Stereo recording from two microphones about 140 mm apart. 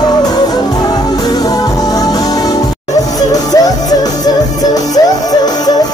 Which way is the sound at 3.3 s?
25° left (ahead or behind).